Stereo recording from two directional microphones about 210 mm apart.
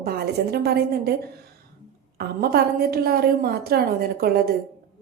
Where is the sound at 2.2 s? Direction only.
45° right (ahead or behind).